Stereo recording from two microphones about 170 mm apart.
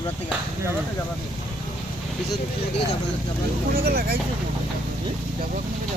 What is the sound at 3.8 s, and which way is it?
Speech, 65° right (ahead or behind).